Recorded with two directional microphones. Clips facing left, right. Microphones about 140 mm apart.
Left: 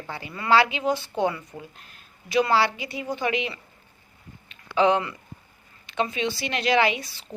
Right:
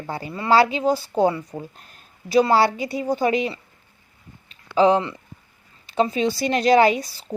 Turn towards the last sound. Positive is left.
turn(degrees=-40)  # may be behind; listen again after turning